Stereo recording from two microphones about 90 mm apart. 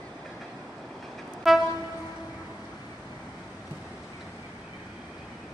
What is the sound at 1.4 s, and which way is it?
Train, centre (ahead or behind).